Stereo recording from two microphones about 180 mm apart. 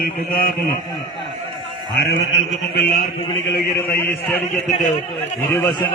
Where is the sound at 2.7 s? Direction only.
65° left (ahead or behind).